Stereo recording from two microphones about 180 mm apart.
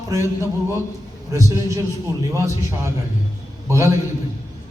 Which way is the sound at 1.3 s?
15° right (ahead or behind).